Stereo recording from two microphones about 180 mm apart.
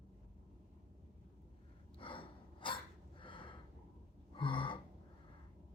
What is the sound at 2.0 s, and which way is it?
Gasp, 30° left (ahead or behind).